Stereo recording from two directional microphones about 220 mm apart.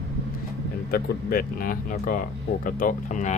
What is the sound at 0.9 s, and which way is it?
Speech, 40° left (ahead or behind).